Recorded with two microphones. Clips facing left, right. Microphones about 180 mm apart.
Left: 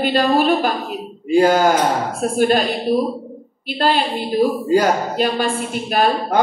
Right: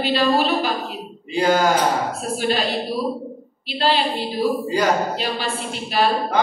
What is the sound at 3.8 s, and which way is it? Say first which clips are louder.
A woman's voice: left 2 dB; 50° left (ahead or behind).